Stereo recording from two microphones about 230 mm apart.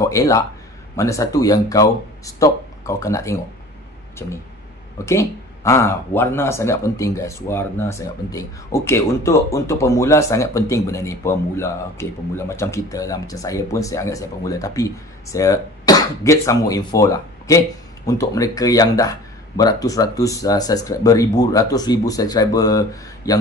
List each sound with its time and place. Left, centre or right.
0.0 s a man's voice: centre